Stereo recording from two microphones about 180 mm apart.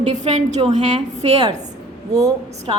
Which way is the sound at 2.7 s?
25° right (ahead or behind).